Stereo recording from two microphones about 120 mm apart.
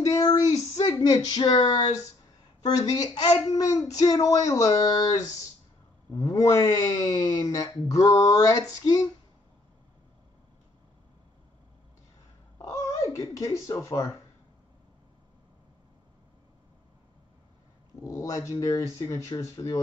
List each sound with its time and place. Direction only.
0.0 s a sound: 30° left (ahead or behind)
0.8 s speech: 30° left (ahead or behind)
6.1 s speech: 30° left (ahead or behind)
12.6 s speech: 30° left (ahead or behind)
18.0 s speech: 30° left (ahead or behind)